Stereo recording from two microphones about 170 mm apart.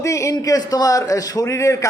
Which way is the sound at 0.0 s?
20° left (ahead or behind).